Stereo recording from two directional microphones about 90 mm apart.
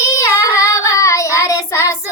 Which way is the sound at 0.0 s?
35° left (ahead or behind).